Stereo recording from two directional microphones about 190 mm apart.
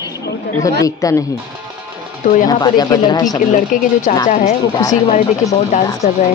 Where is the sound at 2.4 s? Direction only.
20° left (ahead or behind).